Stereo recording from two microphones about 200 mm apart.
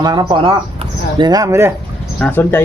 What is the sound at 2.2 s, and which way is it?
Speech, 10° left (ahead or behind).